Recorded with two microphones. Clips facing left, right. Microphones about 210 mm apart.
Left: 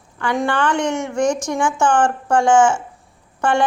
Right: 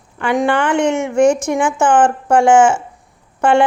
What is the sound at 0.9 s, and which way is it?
A woman's voice, 5° right (ahead or behind).